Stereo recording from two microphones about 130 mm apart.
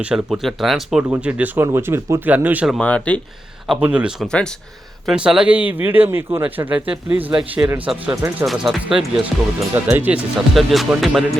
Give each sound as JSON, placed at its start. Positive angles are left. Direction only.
{"t": 0.0, "sound": "speech", "side_deg": -10}
{"t": 2.6, "sound": "speech", "side_deg": 5}
{"t": 3.8, "sound": "speech", "side_deg": -10}
{"t": 8.4, "sound": "speech", "side_deg": -5}
{"t": 9.6, "sound": "speech", "side_deg": -15}
{"t": 10.5, "sound": "speech", "side_deg": 0}